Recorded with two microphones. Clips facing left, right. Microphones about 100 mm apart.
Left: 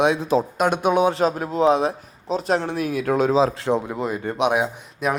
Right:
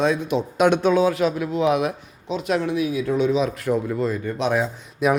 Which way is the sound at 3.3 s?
30° left (ahead or behind).